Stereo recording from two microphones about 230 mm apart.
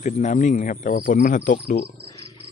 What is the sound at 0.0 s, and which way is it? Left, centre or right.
Speech, left.